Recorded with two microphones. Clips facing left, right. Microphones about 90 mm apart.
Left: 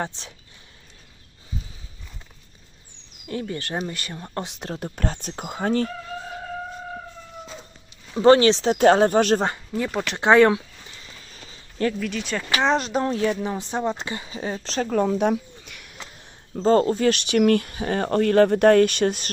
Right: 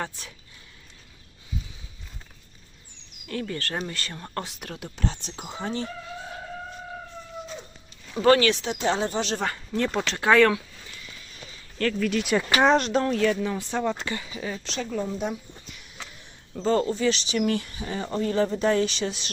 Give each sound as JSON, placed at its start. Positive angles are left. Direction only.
{"t": 0.0, "sound": "speech", "side_deg": 20}
{"t": 3.2, "sound": "speech", "side_deg": 20}
{"t": 4.9, "sound": "speech", "side_deg": 45}
{"t": 8.1, "sound": "speech", "side_deg": 25}
{"t": 8.8, "sound": "speech", "side_deg": 55}
{"t": 9.7, "sound": "speech", "side_deg": 10}
{"t": 10.2, "sound": "speech", "side_deg": 20}
{"t": 11.0, "sound": "a sound", "side_deg": 35}
{"t": 11.9, "sound": "speech", "side_deg": 0}
{"t": 12.3, "sound": "speech", "side_deg": -10}
{"t": 12.7, "sound": "speech", "side_deg": 0}
{"t": 13.1, "sound": "speech", "side_deg": 25}
{"t": 14.8, "sound": "a sound", "side_deg": 65}
{"t": 16.6, "sound": "speech", "side_deg": 45}